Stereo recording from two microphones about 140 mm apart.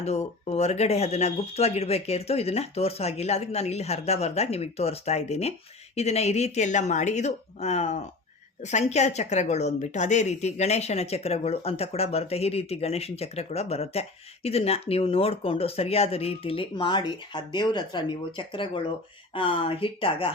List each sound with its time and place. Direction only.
0.0 s a woman's voice: 50° left (ahead or behind)